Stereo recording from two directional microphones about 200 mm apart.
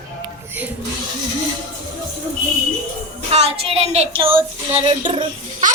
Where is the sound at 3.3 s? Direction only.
30° right (ahead or behind).